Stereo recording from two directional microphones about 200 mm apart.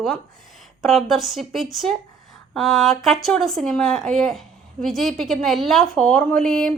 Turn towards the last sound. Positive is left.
turn(degrees=0)  # may be behind; listen again after turning